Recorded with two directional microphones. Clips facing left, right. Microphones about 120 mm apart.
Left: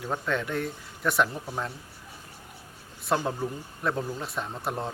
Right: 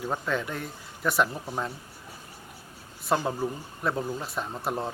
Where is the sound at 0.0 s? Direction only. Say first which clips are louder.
Even; centre (ahead or behind).